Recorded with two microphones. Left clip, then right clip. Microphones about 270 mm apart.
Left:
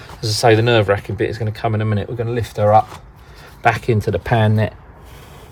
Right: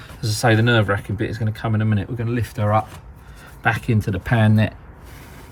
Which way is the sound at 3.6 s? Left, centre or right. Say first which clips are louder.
Left 5 dB; left.